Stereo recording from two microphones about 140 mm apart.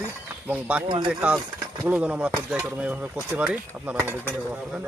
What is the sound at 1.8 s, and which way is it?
Speech, 10° right (ahead or behind).